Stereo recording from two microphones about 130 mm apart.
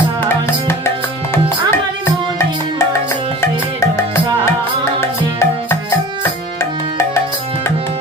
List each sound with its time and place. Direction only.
0.3 s tabla: 20° left (ahead or behind)
3.4 s music: 20° left (ahead or behind)